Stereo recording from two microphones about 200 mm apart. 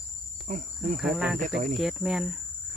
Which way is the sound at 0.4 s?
40° right (ahead or behind).